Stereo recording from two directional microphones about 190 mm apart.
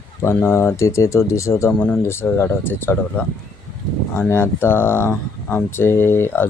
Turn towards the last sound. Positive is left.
turn(degrees=10)  # may be behind; listen again after turning